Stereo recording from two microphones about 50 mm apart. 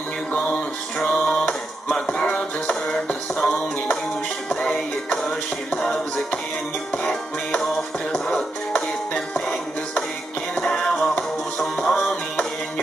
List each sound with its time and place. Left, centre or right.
0.3 s music: centre
8.7 s music: left
10.5 s music: centre